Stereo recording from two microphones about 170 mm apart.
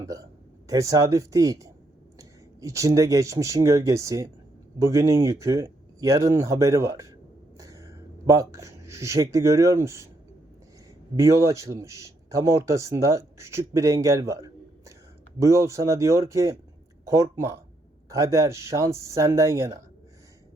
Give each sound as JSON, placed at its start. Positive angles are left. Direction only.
{"t": 0.0, "sound": "a sound", "side_deg": -20}
{"t": 0.7, "sound": "speech", "side_deg": -20}
{"t": 11.2, "sound": "speech", "side_deg": -20}